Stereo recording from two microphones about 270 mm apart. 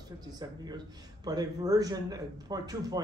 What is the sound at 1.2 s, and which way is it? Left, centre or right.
A man's voice, centre.